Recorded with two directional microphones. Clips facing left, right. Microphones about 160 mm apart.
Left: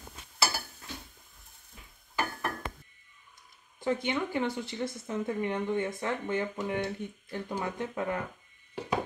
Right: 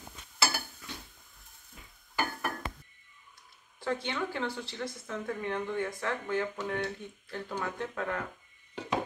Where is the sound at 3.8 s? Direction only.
15° left (ahead or behind).